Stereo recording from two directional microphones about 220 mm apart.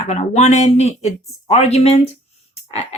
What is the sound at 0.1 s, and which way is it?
Speech, 30° left (ahead or behind).